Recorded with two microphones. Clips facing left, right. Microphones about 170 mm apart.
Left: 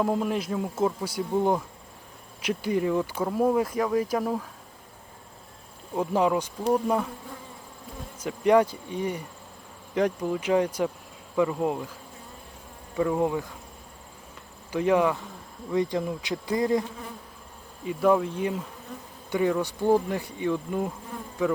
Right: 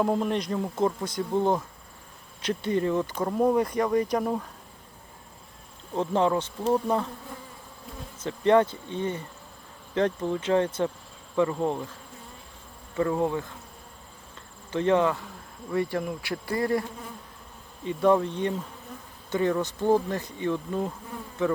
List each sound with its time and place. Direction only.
0.0 s speech: centre (ahead or behind)
2.6 s speech: 10° left (ahead or behind)
5.9 s speech: 10° left (ahead or behind)
8.2 s speech: 10° left (ahead or behind)
13.0 s speech: 10° left (ahead or behind)
14.7 s speech: 10° left (ahead or behind)
17.8 s speech: 5° left (ahead or behind)